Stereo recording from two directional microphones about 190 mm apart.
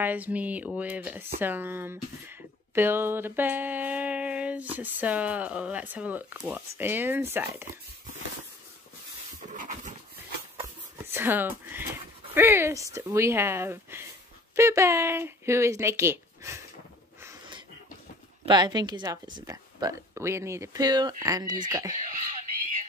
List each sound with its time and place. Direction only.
0.0 s speech: 10° right (ahead or behind)
9.5 s dog: 40° right (ahead or behind)
10.6 s speech: 10° right (ahead or behind)
18.4 s a woman's voice: 25° right (ahead or behind)